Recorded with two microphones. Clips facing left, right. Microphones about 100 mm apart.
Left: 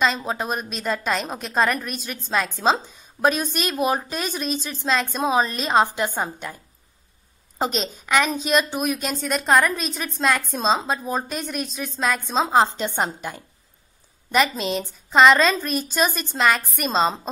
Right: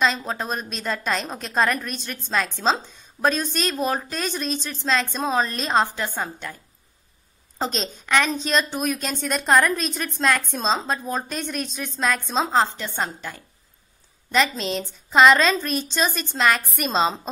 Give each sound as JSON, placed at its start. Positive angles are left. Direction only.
{"t": 0.0, "sound": "a woman's voice", "side_deg": 5}
{"t": 5.9, "sound": "a woman's voice", "side_deg": 15}
{"t": 12.5, "sound": "a woman's voice", "side_deg": 20}